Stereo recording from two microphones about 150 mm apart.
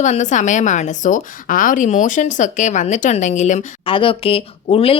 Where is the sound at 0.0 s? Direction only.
55° left (ahead or behind).